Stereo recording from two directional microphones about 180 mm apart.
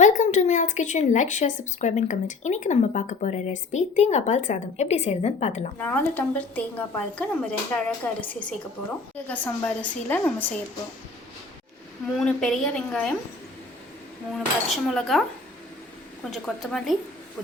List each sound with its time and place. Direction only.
0.0 s speech: 45° left (ahead or behind)
5.7 s a woman's voice: 10° left (ahead or behind)
12.1 s a woman's voice: 5° left (ahead or behind)
14.3 s a woman's voice: centre (ahead or behind)
16.2 s a woman's voice: centre (ahead or behind)